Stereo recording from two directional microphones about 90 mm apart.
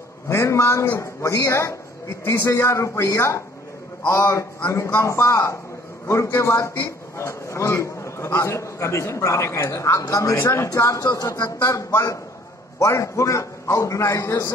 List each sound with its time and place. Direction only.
0.3 s a man's voice: 30° left (ahead or behind)
10.3 s a man's voice: 25° left (ahead or behind); by 11.3 s 45° left (ahead or behind)
11.6 s a man's voice: 30° left (ahead or behind)